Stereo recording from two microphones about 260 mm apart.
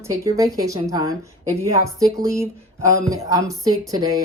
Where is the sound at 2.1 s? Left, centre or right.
Centre.